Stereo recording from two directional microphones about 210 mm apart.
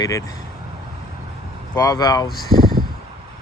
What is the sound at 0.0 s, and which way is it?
Speech, 15° left (ahead or behind).